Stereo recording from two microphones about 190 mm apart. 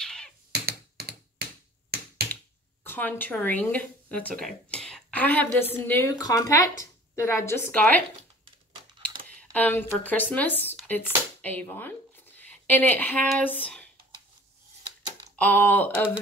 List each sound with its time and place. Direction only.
0.0 s a sound: 5° left (ahead or behind)
0.5 s computer keyboard: 55° right (ahead or behind)
2.8 s a woman's voice: 10° left (ahead or behind)
9.5 s speech: 10° left (ahead or behind)
15.3 s speech: 10° left (ahead or behind)